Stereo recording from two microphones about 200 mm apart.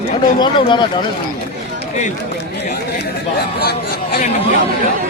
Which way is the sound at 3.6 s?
55° left (ahead or behind).